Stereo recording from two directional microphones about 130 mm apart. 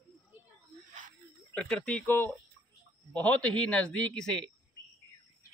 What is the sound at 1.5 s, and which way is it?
Speech, 5° left (ahead or behind).